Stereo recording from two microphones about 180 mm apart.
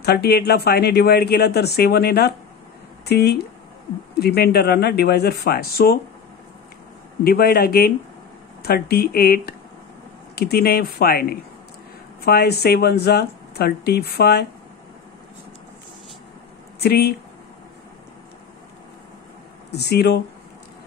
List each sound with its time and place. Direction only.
0.0 s speech: 65° left (ahead or behind)
7.2 s speech: 55° left (ahead or behind)
16.8 s speech: 60° left (ahead or behind)
19.7 s speech: 65° left (ahead or behind)